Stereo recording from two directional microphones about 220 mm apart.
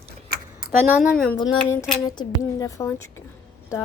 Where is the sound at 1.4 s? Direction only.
15° left (ahead or behind).